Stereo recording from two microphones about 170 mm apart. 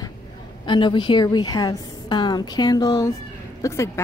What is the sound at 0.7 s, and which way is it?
A woman's voice, 30° left (ahead or behind).